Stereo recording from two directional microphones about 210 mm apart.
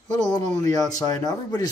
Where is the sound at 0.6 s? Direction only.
15° left (ahead or behind).